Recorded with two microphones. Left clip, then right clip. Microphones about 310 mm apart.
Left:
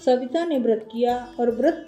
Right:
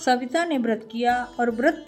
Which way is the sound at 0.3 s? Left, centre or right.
Right.